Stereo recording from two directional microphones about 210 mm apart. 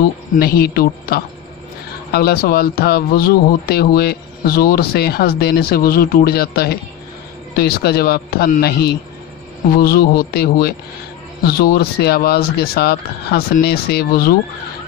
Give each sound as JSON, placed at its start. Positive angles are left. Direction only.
{"t": 0.4, "sound": "speech", "side_deg": 45}